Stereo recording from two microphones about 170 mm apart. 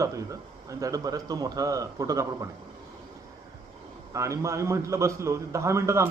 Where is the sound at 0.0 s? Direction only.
20° right (ahead or behind).